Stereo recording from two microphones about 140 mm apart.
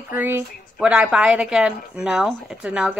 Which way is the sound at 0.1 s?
15° right (ahead or behind).